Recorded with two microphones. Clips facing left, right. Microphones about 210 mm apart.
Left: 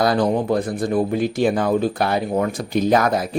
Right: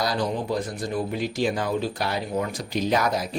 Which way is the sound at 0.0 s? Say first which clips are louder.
Left 8 dB; 55° left (ahead or behind).